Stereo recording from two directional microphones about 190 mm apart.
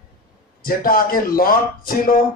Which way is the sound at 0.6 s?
50° left (ahead or behind).